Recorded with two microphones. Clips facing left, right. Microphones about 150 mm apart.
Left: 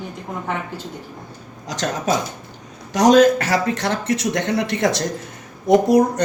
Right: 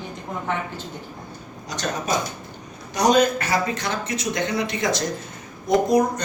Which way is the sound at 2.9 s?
90° left.